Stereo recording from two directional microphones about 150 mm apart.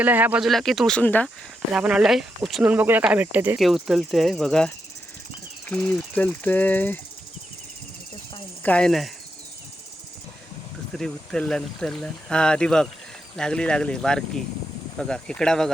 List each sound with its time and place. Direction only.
0.0 s speech: 10° right (ahead or behind)
0.4 s speech: centre (ahead or behind)
1.7 s speech: 5° right (ahead or behind)
3.6 s speech: centre (ahead or behind)
8.6 s speech: 5° left (ahead or behind)
10.9 s speech: 5° left (ahead or behind)